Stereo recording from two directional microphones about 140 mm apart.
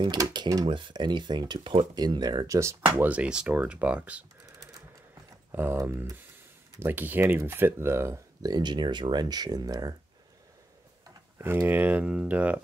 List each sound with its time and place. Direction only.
0.0 s speech: 30° right (ahead or behind); by 4.2 s 10° right (ahead or behind)
5.5 s speech: 15° right (ahead or behind)
11.3 s speech: 15° right (ahead or behind)